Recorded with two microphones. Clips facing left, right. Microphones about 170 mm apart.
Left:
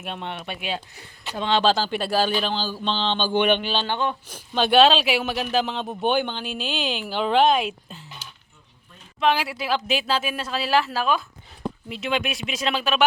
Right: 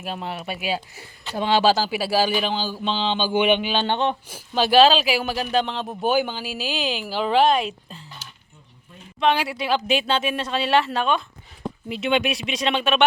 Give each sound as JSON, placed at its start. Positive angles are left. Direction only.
{"t": 0.0, "sound": "speech", "side_deg": -5}
{"t": 3.8, "sound": "speech", "side_deg": -25}
{"t": 4.3, "sound": "speech", "side_deg": -5}
{"t": 9.2, "sound": "speech", "side_deg": 0}